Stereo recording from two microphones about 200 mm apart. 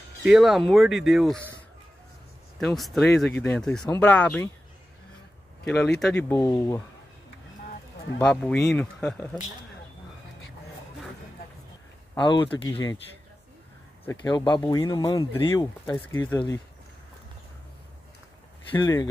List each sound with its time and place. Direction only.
0.2 s speech: 5° right (ahead or behind)
2.6 s speech: centre (ahead or behind)
5.7 s speech: 5° left (ahead or behind)
8.2 s speech: 5° left (ahead or behind)
12.2 s speech: 25° left (ahead or behind)
14.2 s speech: 20° left (ahead or behind)
18.7 s speech: 20° left (ahead or behind)